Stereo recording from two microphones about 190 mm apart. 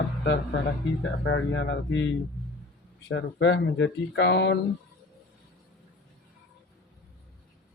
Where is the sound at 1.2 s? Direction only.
65° left (ahead or behind).